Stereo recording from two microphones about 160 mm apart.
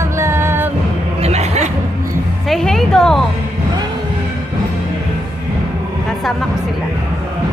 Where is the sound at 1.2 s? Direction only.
45° right (ahead or behind).